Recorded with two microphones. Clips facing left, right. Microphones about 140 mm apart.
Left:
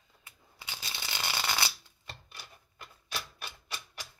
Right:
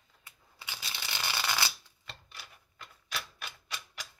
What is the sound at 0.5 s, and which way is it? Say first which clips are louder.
Shuffling cards: even; 20° left (ahead or behind).